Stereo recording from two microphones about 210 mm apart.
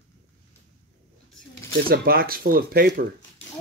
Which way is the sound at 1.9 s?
45° right (ahead or behind).